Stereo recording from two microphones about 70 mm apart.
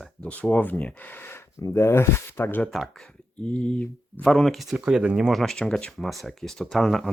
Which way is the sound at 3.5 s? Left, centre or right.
Centre.